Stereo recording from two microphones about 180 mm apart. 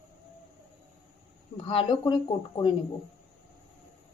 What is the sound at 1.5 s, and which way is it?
Speech, 30° left (ahead or behind).